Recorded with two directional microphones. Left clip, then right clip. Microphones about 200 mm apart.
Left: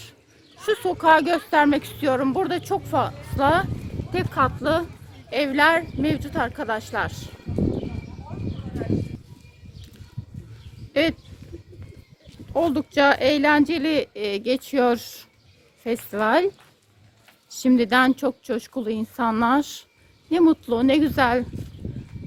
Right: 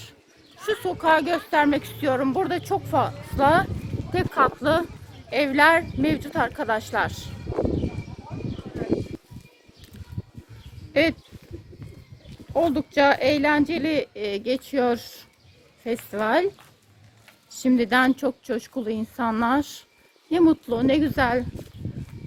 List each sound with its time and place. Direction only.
0.6 s speech: 35° left (ahead or behind); by 7.2 s 5° right (ahead or behind)
10.9 s a sound: 10° left (ahead or behind)
12.5 s speech: 15° left (ahead or behind)
17.6 s speech: 25° left (ahead or behind)
20.7 s speech: 25° left (ahead or behind)